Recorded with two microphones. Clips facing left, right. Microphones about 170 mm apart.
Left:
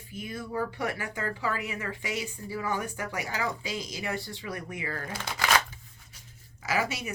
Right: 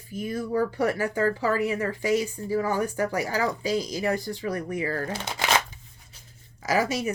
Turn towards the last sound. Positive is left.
turn(degrees=-40)  # may be behind; listen again after turning